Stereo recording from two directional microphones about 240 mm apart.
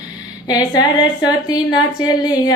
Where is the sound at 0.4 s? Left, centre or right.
Centre.